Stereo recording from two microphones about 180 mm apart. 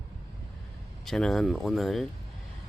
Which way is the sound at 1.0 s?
Centre (ahead or behind).